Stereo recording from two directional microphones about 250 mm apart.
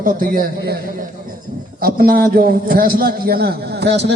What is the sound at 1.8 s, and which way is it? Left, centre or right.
A man's voice, right.